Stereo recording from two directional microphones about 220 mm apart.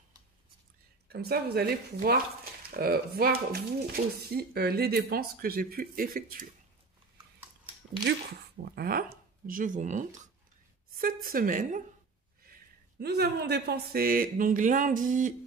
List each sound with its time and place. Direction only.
1.0 s speech: 45° right (ahead or behind)
8.6 s speech: 45° right (ahead or behind)
13.0 s speech: 45° right (ahead or behind)